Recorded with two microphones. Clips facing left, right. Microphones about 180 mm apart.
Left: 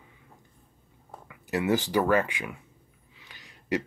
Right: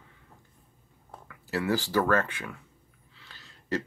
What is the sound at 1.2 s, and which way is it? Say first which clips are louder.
Speech: left 3 dB; 20° left (ahead or behind).